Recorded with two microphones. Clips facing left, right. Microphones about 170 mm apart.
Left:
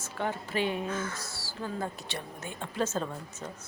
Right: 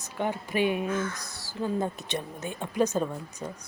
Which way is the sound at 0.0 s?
15° right (ahead or behind).